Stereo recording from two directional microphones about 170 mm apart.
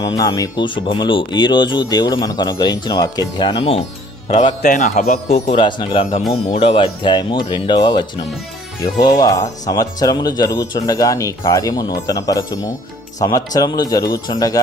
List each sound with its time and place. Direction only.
0.0 s a man's voice: 20° left (ahead or behind)
4.6 s a man's voice: 45° left (ahead or behind); by 14.6 s 20° left (ahead or behind)